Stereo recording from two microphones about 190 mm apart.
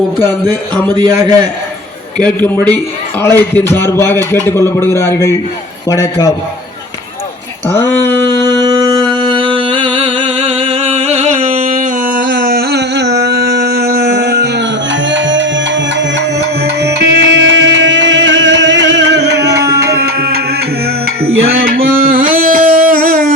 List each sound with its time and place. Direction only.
0.4 s speech: 20° right (ahead or behind)
2.2 s a man's voice: 10° left (ahead or behind)
7.7 s a sound: 10° left (ahead or behind)
8.3 s music: 25° right (ahead or behind); by 14.7 s 60° right (ahead or behind)
15.1 s music: 75° right (ahead or behind)
16.6 s music: 60° right (ahead or behind)
21.8 s music: 45° right (ahead or behind)